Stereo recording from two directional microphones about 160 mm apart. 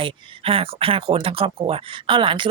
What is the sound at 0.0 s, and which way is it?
Speech, 35° right (ahead or behind).